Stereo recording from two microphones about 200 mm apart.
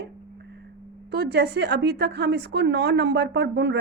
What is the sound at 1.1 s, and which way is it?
A woman's voice, 55° right (ahead or behind).